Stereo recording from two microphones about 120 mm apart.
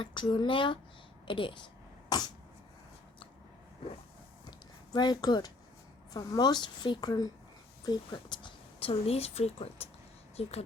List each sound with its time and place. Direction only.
0.0 s a woman's voice: 40° left (ahead or behind)
4.9 s a woman's voice: 35° left (ahead or behind); by 10.5 s 55° left (ahead or behind)